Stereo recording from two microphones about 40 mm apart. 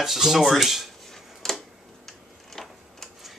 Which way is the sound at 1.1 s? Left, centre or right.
Centre.